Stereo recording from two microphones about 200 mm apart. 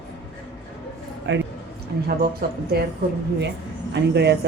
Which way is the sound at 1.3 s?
65° right (ahead or behind).